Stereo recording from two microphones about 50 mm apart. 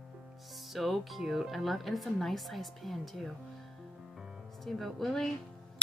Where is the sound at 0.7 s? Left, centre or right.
Centre.